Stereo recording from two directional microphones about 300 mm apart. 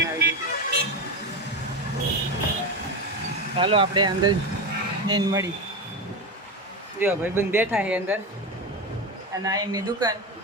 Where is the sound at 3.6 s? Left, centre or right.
Centre.